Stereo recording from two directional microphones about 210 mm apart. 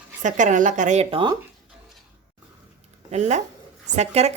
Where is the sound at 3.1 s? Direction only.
35° right (ahead or behind).